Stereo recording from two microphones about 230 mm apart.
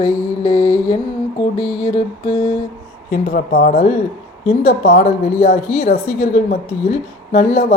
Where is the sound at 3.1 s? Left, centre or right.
Left.